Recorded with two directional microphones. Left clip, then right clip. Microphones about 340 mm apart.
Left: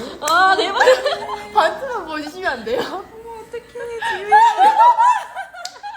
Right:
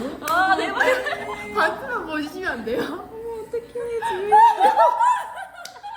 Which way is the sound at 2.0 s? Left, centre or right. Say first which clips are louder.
Left 3 dB; left.